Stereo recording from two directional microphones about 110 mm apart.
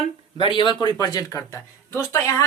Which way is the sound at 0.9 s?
35° left (ahead or behind).